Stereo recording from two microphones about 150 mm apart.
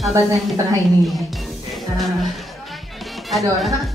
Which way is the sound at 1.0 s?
Centre (ahead or behind).